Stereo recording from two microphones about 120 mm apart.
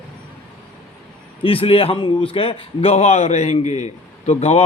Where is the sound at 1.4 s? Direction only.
50° left (ahead or behind).